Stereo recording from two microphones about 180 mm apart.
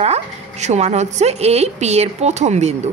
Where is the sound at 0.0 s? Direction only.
35° right (ahead or behind).